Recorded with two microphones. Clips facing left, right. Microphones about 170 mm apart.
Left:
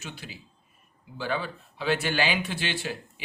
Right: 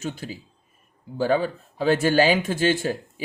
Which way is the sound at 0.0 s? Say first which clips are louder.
Right 10 dB; 45° right (ahead or behind).